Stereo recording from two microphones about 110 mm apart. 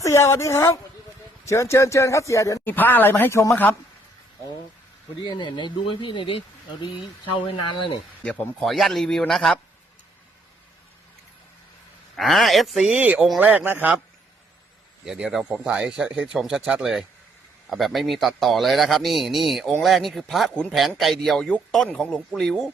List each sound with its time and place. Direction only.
0.0 s speech: 25° left (ahead or behind)
2.7 s speech: 15° left (ahead or behind)
5.2 s speech: 45° left (ahead or behind)
7.4 s speech: 50° left (ahead or behind)
8.2 s a man's voice: 5° left (ahead or behind)
12.1 s a man's voice: centre (ahead or behind); by 13.9 s 15° right (ahead or behind)
15.0 s a man's voice: 5° right (ahead or behind)